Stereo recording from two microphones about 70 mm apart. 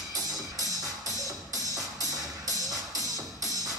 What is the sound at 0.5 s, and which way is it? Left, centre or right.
Music, right.